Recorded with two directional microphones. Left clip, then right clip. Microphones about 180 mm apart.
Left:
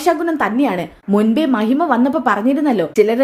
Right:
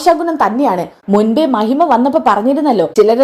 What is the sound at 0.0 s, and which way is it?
A woman's voice, 5° left (ahead or behind).